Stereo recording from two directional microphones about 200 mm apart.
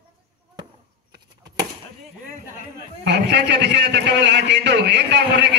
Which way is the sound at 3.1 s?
55° right (ahead or behind).